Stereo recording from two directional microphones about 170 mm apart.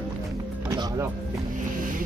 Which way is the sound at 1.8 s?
55° right (ahead or behind).